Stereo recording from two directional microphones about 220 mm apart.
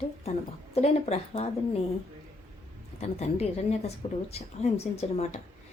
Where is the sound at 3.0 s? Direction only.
30° left (ahead or behind).